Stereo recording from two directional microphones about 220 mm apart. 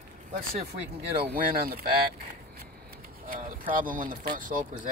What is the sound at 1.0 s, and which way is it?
Speech, 25° right (ahead or behind).